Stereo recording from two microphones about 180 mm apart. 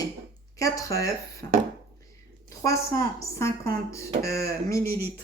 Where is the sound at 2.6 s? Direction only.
15° left (ahead or behind).